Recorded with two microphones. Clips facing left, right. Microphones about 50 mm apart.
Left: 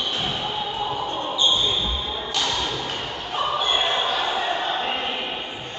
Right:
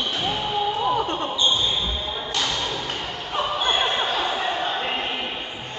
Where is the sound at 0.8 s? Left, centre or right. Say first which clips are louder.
Right 5 dB; right.